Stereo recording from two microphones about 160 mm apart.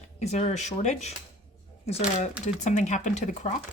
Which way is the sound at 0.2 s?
45° left (ahead or behind).